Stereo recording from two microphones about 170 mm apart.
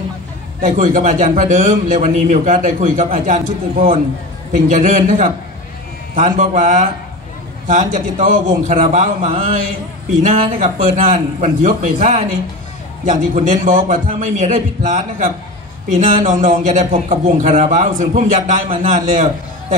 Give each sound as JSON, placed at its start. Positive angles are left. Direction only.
{"t": 0.6, "sound": "a man's voice", "side_deg": -50}